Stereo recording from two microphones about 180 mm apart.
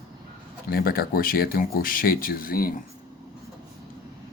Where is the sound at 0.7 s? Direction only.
55° left (ahead or behind).